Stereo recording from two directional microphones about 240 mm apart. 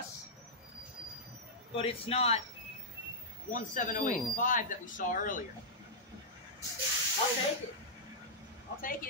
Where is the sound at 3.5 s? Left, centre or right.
Left.